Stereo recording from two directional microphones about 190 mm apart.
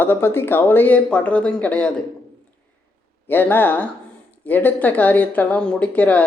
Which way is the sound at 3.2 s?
10° left (ahead or behind).